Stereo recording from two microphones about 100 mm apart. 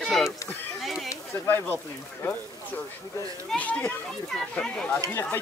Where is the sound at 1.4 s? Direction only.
25° left (ahead or behind).